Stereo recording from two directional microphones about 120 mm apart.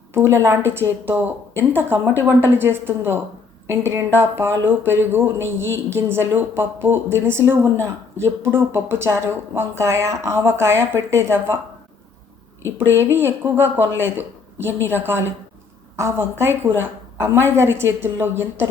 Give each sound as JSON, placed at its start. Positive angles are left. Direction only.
{"t": 0.1, "sound": "speech", "side_deg": -20}
{"t": 12.6, "sound": "speech", "side_deg": -20}